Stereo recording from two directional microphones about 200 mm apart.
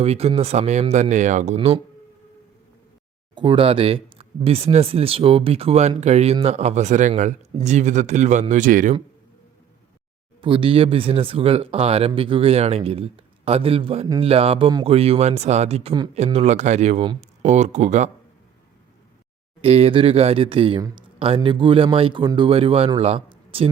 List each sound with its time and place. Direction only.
0.0 s speech: 30° right (ahead or behind)
3.3 s speech: 25° right (ahead or behind); by 9.0 s 40° right (ahead or behind)
10.4 s speech: 25° right (ahead or behind)
19.6 s speech: 30° right (ahead or behind)